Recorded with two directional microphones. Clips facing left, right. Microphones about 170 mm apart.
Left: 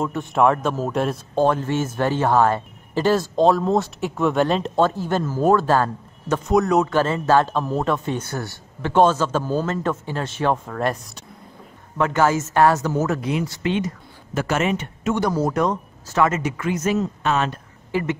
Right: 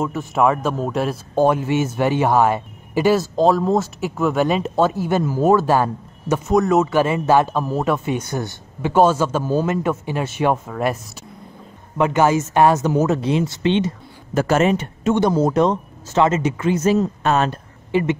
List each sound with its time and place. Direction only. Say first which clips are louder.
0.0 s speech: even; centre (ahead or behind)
7.0 s speech: right 2 dB; 15° right (ahead or behind)
12.0 s speech: right 3 dB; 15° right (ahead or behind)
14.3 s speech: right 5 dB; 40° right (ahead or behind)
15.1 s speech: right 4 dB; 20° right (ahead or behind); by 17.6 s 40° right (ahead or behind)